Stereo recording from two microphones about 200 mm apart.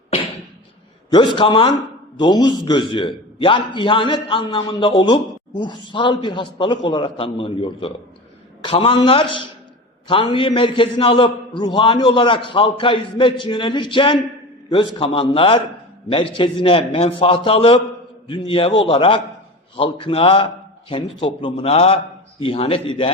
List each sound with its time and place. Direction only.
1.1 s a man's voice: 25° left (ahead or behind)